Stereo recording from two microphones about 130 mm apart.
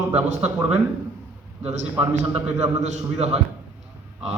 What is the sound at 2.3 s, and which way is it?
A man's voice, 60° right (ahead or behind).